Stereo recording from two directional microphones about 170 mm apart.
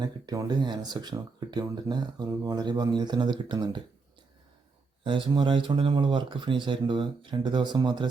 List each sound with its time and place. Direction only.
0.0 s speech: 20° right (ahead or behind)
5.0 s speech: 30° right (ahead or behind)